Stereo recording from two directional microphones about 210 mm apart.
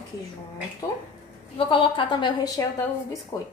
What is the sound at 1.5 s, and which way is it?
A woman's voice, 25° left (ahead or behind).